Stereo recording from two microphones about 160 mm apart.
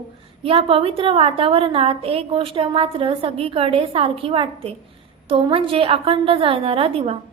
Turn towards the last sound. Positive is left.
turn(degrees=-35)  # may be behind; listen again after turning